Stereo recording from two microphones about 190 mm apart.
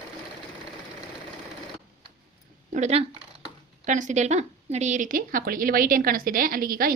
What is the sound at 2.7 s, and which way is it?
Speech, 35° right (ahead or behind).